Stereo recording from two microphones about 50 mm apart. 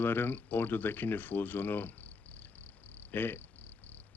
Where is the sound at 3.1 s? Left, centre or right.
Left.